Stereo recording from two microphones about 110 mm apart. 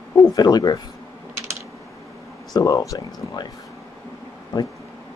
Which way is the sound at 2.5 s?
35° left (ahead or behind).